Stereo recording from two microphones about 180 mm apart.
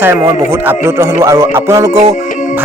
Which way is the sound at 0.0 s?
15° right (ahead or behind).